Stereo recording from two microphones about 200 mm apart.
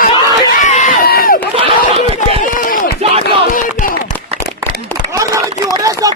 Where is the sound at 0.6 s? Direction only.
35° left (ahead or behind).